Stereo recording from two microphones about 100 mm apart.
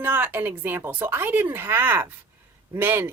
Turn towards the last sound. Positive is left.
turn(degrees=-25)  # may be behind; listen again after turning